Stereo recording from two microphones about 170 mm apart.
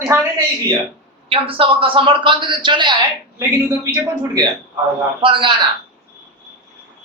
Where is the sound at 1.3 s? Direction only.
30° right (ahead or behind).